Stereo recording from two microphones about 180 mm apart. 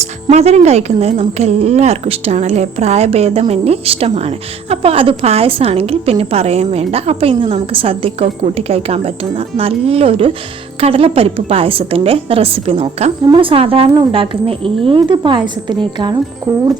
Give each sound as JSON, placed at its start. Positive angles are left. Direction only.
{"t": 0.0, "sound": "a woman's voice", "side_deg": -40}